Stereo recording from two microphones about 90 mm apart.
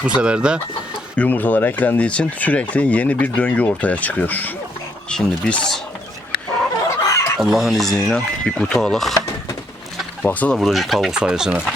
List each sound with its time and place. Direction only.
0.0 s speech: 10° right (ahead or behind)
1.1 s speech: 15° left (ahead or behind)
7.0 s snicker: 40° left (ahead or behind)
7.3 s speech: centre (ahead or behind)
10.2 s speech: 15° left (ahead or behind)
10.6 s speech: centre (ahead or behind)